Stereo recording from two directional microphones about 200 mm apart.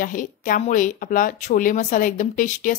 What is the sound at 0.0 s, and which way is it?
Speech, 40° left (ahead or behind).